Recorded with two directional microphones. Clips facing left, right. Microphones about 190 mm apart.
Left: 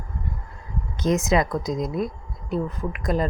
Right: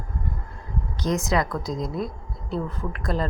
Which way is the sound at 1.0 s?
20° left (ahead or behind).